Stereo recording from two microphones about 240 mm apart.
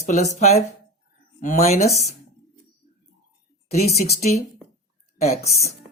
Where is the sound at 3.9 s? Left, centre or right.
Left.